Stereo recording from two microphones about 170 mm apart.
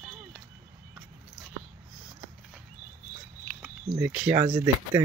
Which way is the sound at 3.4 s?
5° right (ahead or behind).